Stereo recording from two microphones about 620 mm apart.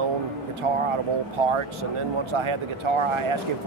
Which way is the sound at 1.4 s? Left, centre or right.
Right.